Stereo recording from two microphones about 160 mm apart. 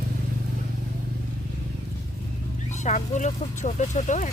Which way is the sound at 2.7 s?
50° left (ahead or behind).